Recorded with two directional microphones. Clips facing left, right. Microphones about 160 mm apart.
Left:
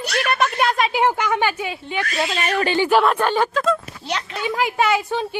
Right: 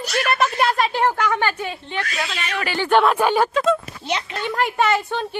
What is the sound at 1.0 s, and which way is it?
A woman's voice, 15° left (ahead or behind).